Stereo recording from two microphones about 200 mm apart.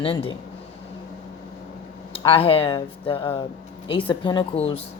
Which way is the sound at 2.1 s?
25° left (ahead or behind).